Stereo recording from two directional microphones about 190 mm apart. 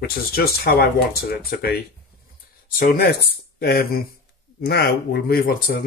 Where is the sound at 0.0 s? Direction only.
55° left (ahead or behind).